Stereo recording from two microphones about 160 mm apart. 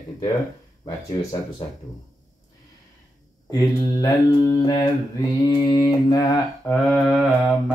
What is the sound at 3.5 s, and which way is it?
Mantra, 20° left (ahead or behind).